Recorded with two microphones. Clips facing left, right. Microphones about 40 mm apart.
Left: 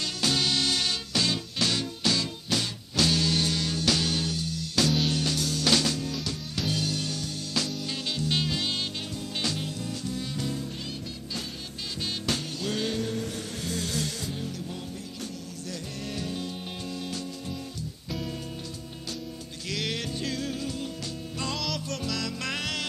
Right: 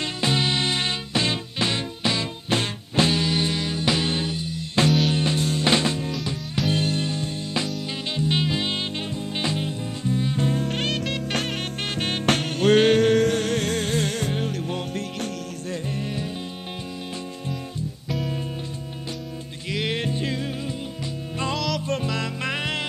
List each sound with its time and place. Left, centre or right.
0.0 s music: right
10.6 s music: right
12.0 s music: right
19.7 s music: right
21.5 s music: centre
21.8 s music: right